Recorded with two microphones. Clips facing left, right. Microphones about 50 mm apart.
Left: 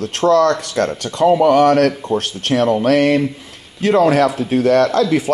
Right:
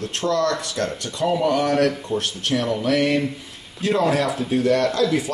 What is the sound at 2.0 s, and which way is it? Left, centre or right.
Speech, left.